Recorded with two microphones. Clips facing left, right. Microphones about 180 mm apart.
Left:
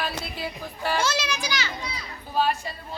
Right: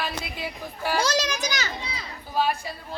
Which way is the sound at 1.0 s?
40° right (ahead or behind).